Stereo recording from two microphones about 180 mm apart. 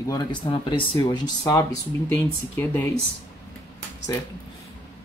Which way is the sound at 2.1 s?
10° left (ahead or behind).